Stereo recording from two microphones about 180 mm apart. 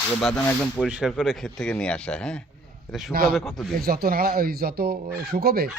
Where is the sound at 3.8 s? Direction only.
55° right (ahead or behind).